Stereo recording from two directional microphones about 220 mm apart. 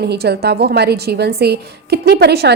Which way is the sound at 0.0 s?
50° right (ahead or behind).